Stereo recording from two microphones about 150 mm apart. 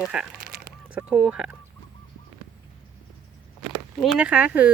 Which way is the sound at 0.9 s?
10° right (ahead or behind).